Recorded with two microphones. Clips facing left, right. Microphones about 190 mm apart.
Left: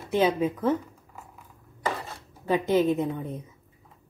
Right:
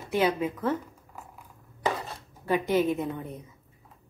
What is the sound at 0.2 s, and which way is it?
Speech, 20° left (ahead or behind).